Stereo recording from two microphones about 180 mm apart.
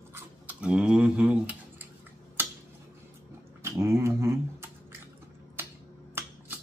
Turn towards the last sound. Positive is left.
turn(degrees=-10)  # may be behind; listen again after turning